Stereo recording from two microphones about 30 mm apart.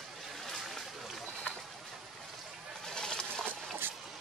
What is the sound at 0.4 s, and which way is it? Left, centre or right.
Vehicle, centre.